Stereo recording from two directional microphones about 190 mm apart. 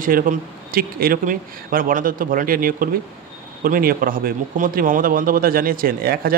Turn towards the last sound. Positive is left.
turn(degrees=-50)  # may be behind; listen again after turning